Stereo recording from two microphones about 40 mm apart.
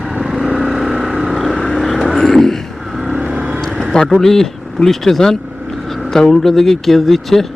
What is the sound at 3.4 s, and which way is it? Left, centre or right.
Vehicle, right.